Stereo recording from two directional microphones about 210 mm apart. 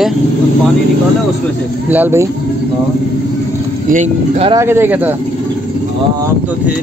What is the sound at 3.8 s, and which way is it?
Speech, 35° right (ahead or behind).